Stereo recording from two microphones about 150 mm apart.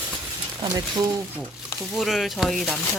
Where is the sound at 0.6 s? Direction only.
25° right (ahead or behind).